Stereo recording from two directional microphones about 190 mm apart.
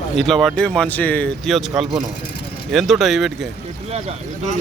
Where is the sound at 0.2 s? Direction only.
Centre (ahead or behind).